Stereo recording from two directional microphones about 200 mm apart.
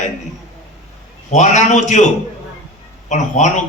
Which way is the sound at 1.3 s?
35° left (ahead or behind).